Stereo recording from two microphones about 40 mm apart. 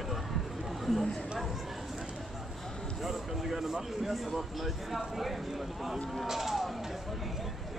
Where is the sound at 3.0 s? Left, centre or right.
Centre.